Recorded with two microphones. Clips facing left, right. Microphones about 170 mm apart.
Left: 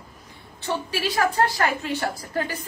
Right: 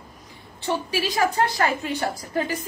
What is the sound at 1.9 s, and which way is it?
Speech, 15° right (ahead or behind).